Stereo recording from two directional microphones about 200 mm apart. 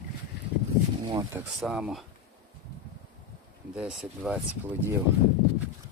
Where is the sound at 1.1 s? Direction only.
15° right (ahead or behind).